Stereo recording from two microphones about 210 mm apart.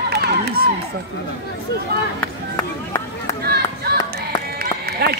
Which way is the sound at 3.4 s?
50° right (ahead or behind).